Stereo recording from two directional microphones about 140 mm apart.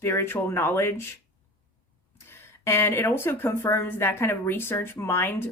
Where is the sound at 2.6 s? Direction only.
15° left (ahead or behind).